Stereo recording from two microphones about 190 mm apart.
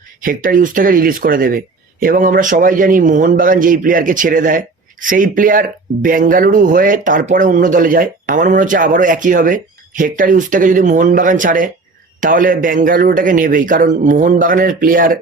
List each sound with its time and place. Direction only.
0.2 s speech: 45° right (ahead or behind)